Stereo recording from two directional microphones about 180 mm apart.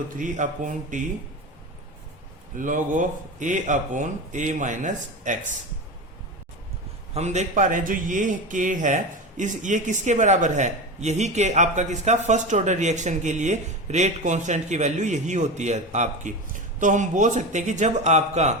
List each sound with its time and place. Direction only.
0.2 s speech: 45° right (ahead or behind)
2.6 s speech: 45° right (ahead or behind)
7.1 s a man's voice: 40° right (ahead or behind)